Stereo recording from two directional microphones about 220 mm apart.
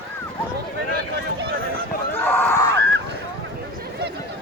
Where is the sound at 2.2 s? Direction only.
10° left (ahead or behind).